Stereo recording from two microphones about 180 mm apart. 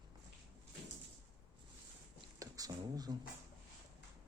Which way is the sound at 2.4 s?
20° right (ahead or behind).